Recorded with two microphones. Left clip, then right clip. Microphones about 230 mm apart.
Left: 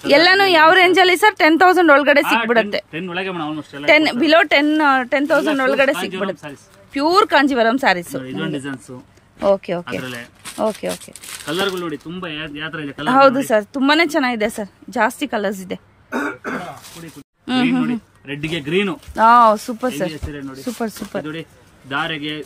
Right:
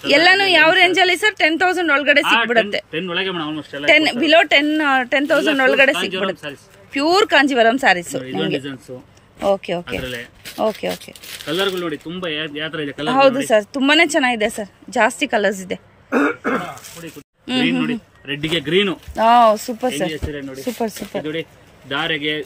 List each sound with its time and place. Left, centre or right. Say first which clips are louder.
0.0 s a woman's voice: left 1 dB; centre
16.1 s throat clearing: right 5 dB; right
17.5 s a woman's voice: even; centre